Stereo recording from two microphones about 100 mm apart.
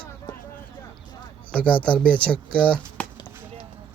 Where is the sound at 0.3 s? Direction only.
45° left (ahead or behind).